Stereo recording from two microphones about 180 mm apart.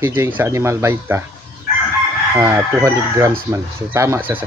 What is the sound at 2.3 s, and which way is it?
Speech, 15° right (ahead or behind).